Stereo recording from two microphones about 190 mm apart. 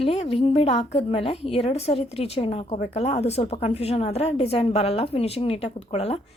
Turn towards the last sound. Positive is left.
turn(degrees=35)  # may be behind; listen again after turning